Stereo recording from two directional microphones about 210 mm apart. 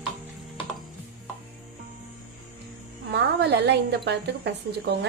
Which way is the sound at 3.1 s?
55° right (ahead or behind).